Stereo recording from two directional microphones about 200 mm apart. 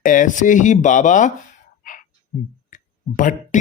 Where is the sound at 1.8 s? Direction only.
40° left (ahead or behind).